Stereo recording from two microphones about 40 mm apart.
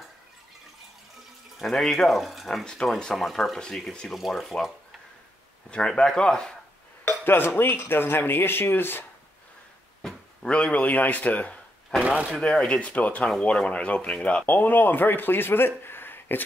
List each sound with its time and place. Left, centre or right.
1.6 s speech: centre
2.1 s speech: centre
2.6 s speech: centre
3.4 s speech: centre
5.7 s speech: left
7.1 s speech: left
10.0 s a sound: centre
10.5 s a man's voice: left
12.0 s speech: right
12.4 s a man's voice: left
13.4 s a man's voice: left
14.4 s speech: left